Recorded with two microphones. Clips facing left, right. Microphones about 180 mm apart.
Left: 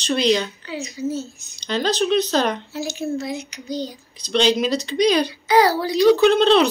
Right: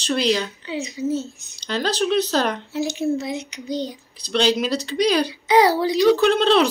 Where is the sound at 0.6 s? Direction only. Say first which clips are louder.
Right 1 dB; 20° right (ahead or behind).